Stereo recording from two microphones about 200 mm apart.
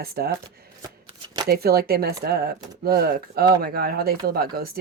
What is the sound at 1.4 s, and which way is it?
Speech, 50° right (ahead or behind).